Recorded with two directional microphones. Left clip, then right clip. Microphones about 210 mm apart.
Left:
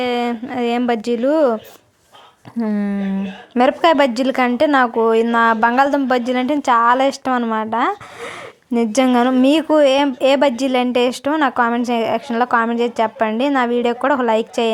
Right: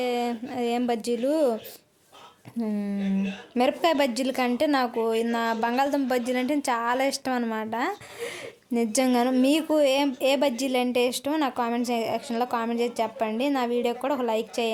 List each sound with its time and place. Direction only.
0.0 s a woman's voice: 15° left (ahead or behind)
2.6 s a woman's voice: 10° left (ahead or behind)